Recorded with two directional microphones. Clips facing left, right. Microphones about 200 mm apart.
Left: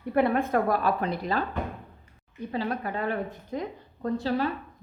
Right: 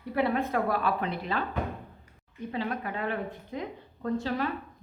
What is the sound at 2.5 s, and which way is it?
A woman's voice, 35° left (ahead or behind).